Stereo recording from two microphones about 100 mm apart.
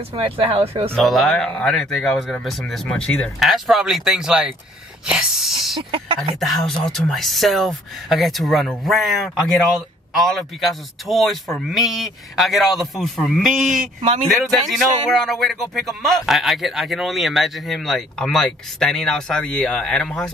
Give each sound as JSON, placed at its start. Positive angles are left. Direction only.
{"t": 0.1, "sound": "speech", "side_deg": -70}
{"t": 0.9, "sound": "speech", "side_deg": 0}
{"t": 5.0, "sound": "sneeze", "side_deg": -5}
{"t": 5.8, "sound": "speech", "side_deg": -60}
{"t": 6.4, "sound": "speech", "side_deg": 0}